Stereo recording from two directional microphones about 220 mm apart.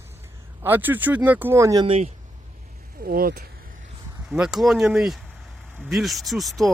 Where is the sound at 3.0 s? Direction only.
45° right (ahead or behind).